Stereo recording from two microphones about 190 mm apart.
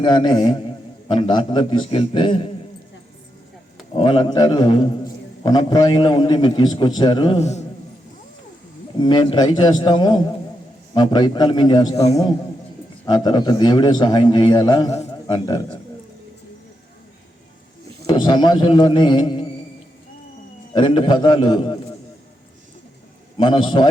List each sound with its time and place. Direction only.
0.0 s a man's voice: 25° left (ahead or behind)
3.9 s a man's voice: 30° left (ahead or behind)
9.0 s a man's voice: 25° left (ahead or behind)
13.1 s a man's voice: 20° left (ahead or behind)
18.0 s a man's voice: 25° left (ahead or behind)
20.7 s a man's voice: 25° left (ahead or behind)
23.4 s a man's voice: 25° left (ahead or behind)